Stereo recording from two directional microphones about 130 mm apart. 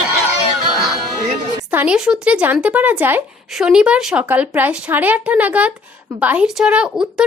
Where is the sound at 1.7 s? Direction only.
10° right (ahead or behind).